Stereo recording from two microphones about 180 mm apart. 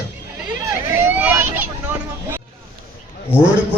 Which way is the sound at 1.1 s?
10° right (ahead or behind).